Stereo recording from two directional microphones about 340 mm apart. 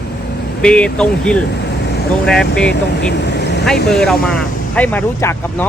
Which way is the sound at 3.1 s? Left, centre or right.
Left.